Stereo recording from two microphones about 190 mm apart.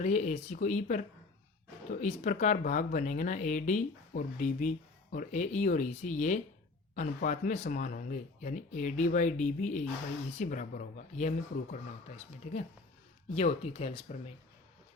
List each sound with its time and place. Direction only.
0.0 s speech: 40° left (ahead or behind)